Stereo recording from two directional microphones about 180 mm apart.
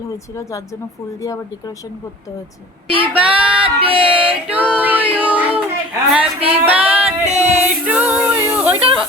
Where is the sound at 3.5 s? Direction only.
30° right (ahead or behind).